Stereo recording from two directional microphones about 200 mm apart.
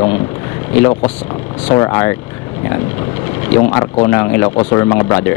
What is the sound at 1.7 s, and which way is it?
Speech, 20° left (ahead or behind).